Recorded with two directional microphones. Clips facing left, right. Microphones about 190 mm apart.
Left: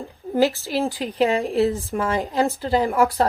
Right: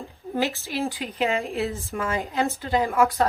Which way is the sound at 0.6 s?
35° left (ahead or behind).